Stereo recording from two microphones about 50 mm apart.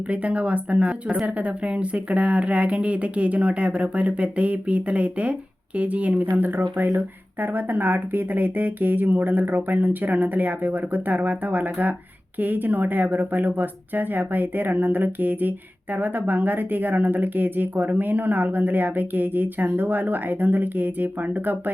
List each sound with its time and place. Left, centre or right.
0.1 s speech: right